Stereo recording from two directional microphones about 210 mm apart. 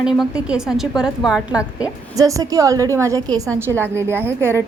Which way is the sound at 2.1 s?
15° right (ahead or behind).